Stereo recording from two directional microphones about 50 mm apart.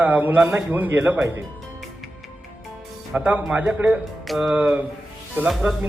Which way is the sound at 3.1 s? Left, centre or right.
Right.